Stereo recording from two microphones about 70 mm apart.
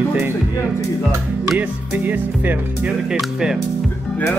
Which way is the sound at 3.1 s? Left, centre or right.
Centre.